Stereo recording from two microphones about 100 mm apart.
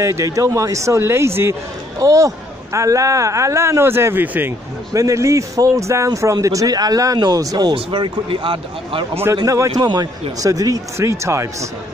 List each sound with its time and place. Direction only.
0.0 s speech: 30° right (ahead or behind)
4.9 s speech: 30° right (ahead or behind)
7.7 s speech: 60° right (ahead or behind)
9.4 s speech: 35° right (ahead or behind)
9.8 s speech: 45° right (ahead or behind)
10.4 s speech: 35° right (ahead or behind)